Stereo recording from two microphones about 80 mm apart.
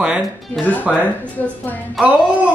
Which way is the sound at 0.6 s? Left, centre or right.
Centre.